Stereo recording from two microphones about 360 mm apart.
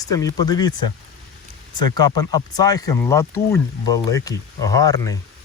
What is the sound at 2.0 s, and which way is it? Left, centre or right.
Speech, centre.